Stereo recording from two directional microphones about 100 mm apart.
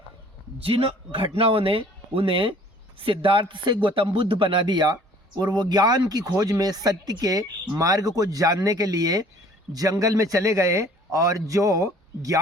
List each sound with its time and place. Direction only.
0.6 s speech: 70° right (ahead or behind); by 12.4 s 35° right (ahead or behind)